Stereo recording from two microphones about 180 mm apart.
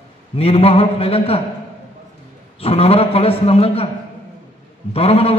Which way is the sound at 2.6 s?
35° left (ahead or behind).